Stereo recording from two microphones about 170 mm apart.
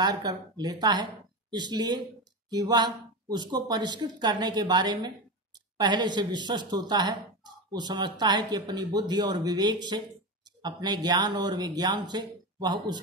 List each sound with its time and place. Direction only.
0.0 s speech: 25° right (ahead or behind)